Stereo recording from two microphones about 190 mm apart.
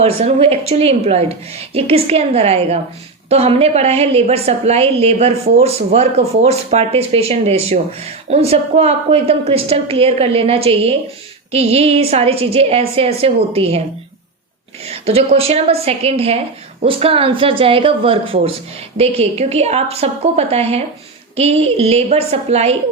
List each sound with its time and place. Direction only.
0.0 s a woman's voice: 30° right (ahead or behind)
14.8 s a woman's voice: 35° right (ahead or behind)